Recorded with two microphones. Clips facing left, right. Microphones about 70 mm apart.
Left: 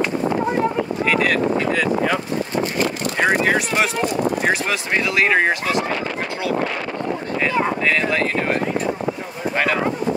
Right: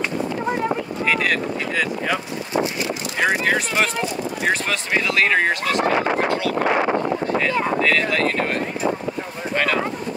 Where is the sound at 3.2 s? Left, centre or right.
Centre.